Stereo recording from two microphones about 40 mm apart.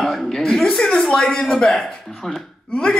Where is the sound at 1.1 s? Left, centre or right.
Left.